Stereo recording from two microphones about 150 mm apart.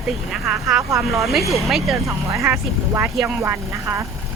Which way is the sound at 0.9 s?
20° right (ahead or behind).